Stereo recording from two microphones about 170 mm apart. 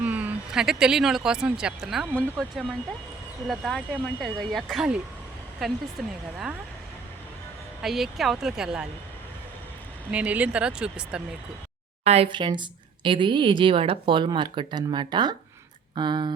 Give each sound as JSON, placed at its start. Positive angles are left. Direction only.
{"t": 0.0, "sound": "speech", "side_deg": -10}
{"t": 6.0, "sound": "speech", "side_deg": 0}
{"t": 7.8, "sound": "speech", "side_deg": 0}
{"t": 10.1, "sound": "speech", "side_deg": -10}
{"t": 12.0, "sound": "a woman's voice", "side_deg": -35}